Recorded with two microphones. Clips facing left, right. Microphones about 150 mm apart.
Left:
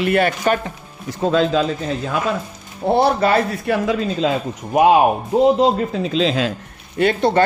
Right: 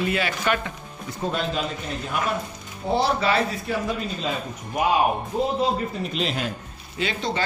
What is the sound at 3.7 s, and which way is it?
Speech, 90° left.